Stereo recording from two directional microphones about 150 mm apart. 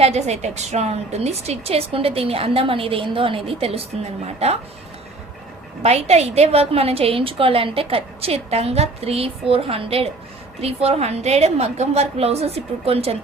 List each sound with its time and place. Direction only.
0.0 s a woman's voice: 45° right (ahead or behind)
5.8 s a woman's voice: 45° right (ahead or behind)